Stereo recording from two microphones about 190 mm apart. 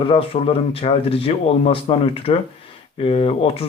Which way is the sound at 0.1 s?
30° left (ahead or behind).